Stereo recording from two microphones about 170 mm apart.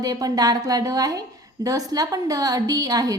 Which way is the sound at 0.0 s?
20° right (ahead or behind).